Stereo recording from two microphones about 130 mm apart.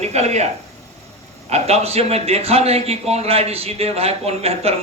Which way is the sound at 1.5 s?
55° right (ahead or behind).